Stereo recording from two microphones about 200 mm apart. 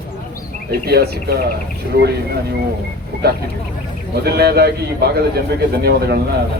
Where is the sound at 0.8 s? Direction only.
50° right (ahead or behind).